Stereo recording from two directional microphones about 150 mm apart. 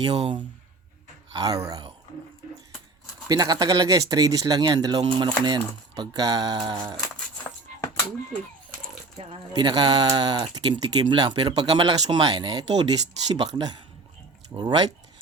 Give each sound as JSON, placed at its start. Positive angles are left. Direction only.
{"t": 0.0, "sound": "speech", "side_deg": -35}
{"t": 3.2, "sound": "speech", "side_deg": -25}
{"t": 9.1, "sound": "speech", "side_deg": -35}